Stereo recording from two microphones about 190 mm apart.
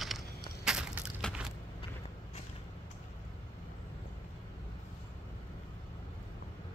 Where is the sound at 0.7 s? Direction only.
5° right (ahead or behind).